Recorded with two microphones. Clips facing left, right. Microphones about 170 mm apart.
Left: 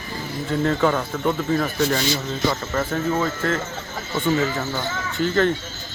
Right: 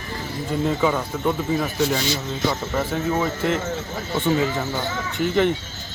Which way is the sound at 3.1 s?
15° right (ahead or behind).